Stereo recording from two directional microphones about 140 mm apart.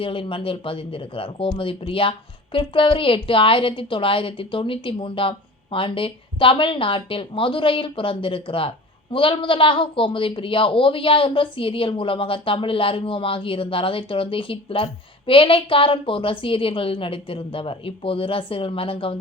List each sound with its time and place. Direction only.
0.0 s a woman's voice: 40° left (ahead or behind)